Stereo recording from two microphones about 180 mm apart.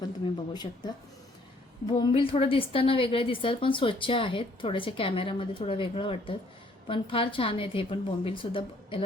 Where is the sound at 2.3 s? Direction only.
30° left (ahead or behind).